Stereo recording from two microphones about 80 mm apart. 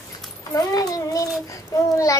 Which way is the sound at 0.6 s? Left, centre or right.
Left.